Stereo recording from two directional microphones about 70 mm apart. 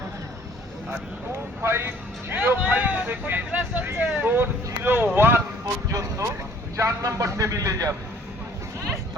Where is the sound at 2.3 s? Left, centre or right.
Right.